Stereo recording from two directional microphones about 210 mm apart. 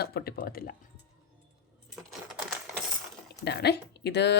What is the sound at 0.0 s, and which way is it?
Speech, 50° left (ahead or behind).